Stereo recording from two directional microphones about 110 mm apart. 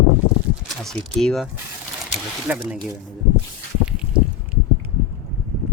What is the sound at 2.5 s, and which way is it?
Speech, 15° right (ahead or behind).